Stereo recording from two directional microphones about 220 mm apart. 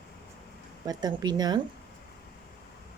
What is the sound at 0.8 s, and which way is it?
Speech, 20° right (ahead or behind).